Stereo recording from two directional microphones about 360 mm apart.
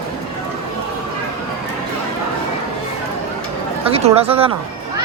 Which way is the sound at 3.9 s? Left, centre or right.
Centre.